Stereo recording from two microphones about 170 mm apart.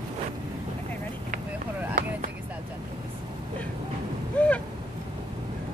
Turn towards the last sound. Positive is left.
turn(degrees=5)  # may be behind; listen again after turning